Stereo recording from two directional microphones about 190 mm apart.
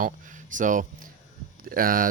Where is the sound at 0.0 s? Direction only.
45° right (ahead or behind).